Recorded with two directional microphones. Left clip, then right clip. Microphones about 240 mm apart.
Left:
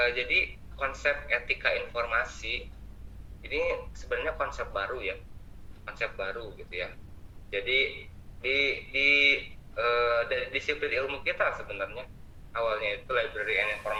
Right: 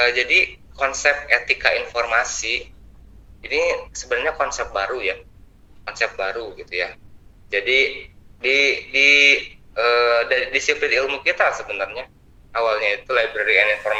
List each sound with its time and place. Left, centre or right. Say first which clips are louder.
0.0 s a man's voice: right 10 dB; right